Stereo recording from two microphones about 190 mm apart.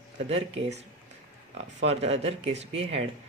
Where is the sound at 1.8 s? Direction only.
35° right (ahead or behind).